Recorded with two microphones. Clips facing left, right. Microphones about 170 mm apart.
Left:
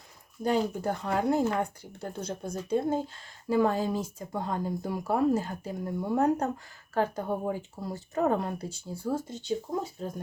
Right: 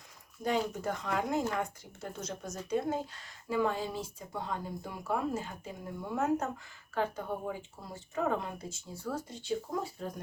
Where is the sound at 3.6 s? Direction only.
40° left (ahead or behind).